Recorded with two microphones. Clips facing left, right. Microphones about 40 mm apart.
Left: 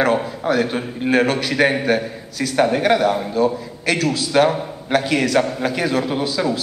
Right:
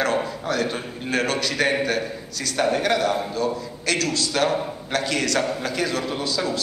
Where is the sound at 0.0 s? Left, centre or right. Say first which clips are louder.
Left 5 dB; centre.